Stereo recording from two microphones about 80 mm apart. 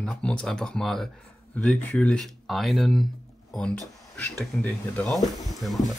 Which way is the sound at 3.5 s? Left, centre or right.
Centre.